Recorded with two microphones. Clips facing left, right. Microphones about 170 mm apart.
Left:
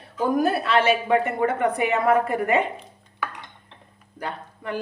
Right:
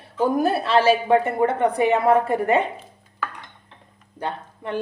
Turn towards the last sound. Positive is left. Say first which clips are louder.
# right 2 dB
turn(degrees=-25)  # may be behind; listen again after turning